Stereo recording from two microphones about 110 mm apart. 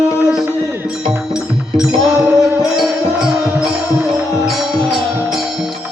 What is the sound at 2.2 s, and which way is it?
Music, 20° right (ahead or behind).